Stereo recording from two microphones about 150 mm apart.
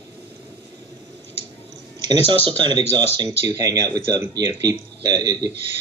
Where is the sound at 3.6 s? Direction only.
25° right (ahead or behind).